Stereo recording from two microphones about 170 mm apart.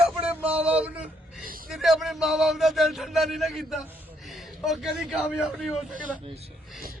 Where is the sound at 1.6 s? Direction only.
Centre (ahead or behind).